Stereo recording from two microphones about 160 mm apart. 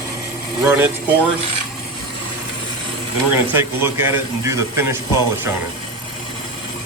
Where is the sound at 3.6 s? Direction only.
15° right (ahead or behind).